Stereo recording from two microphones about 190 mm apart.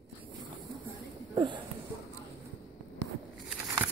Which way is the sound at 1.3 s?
25° right (ahead or behind).